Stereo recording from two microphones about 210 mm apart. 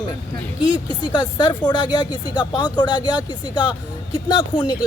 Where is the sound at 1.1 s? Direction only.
20° left (ahead or behind).